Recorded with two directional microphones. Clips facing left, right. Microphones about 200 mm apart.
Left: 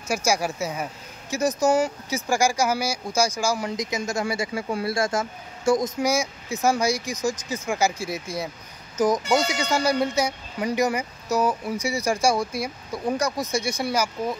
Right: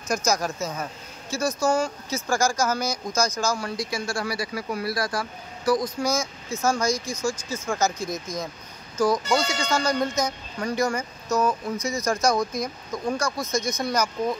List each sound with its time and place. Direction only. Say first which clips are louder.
0.1 s speech: left 1 dB; 10° left (ahead or behind)